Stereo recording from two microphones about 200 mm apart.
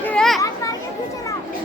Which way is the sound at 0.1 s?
Centre (ahead or behind).